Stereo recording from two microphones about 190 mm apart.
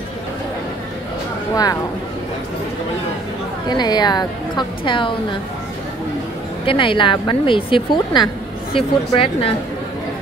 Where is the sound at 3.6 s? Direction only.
20° left (ahead or behind).